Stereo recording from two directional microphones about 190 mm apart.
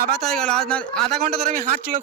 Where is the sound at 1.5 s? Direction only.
45° right (ahead or behind).